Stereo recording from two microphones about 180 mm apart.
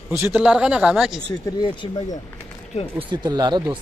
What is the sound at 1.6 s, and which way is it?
Speech, 25° left (ahead or behind).